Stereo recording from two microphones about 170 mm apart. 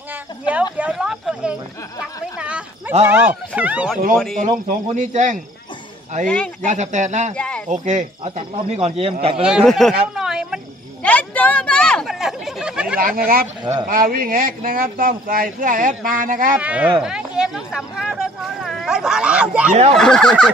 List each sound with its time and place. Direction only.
0.5 s speech: 10° right (ahead or behind)
4.6 s speech: 45° right (ahead or behind)
6.2 s speech: 5° left (ahead or behind)
6.6 s speech: 45° right (ahead or behind)
7.3 s speech: 5° left (ahead or behind)
7.6 s speech: 45° right (ahead or behind)
9.4 s speech: centre (ahead or behind)
11.1 s speech: 10° left (ahead or behind)
13.0 s speech: 60° right (ahead or behind)
16.5 s a sound: 10° right (ahead or behind)
19.7 s speech: 40° right (ahead or behind)
20.0 s speech: 5° left (ahead or behind)